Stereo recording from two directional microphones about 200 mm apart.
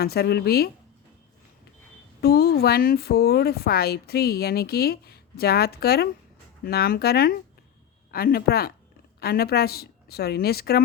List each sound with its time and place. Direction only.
0.0 s speech: 50° left (ahead or behind)
2.2 s speech: 50° left (ahead or behind)